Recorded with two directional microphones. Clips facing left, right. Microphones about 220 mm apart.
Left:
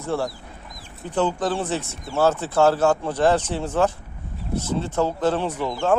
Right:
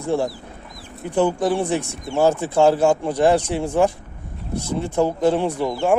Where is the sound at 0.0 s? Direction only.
15° right (ahead or behind).